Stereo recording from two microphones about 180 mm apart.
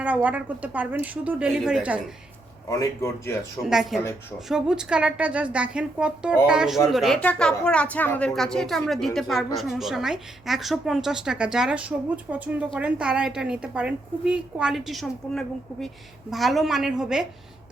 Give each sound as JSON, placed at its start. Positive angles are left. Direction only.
{"t": 0.0, "sound": "a woman's voice", "side_deg": -10}
{"t": 2.6, "sound": "speech", "side_deg": 20}
{"t": 3.6, "sound": "a woman's voice", "side_deg": 0}